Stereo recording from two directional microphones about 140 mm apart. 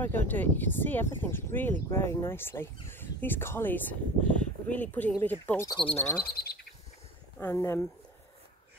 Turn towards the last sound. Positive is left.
turn(degrees=20)  # may be behind; listen again after turning